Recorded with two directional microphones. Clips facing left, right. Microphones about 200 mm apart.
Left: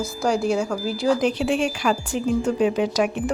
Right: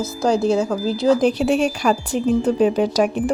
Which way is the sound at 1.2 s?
35° right (ahead or behind).